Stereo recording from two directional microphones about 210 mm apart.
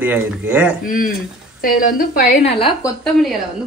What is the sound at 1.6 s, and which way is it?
Speech, 40° left (ahead or behind).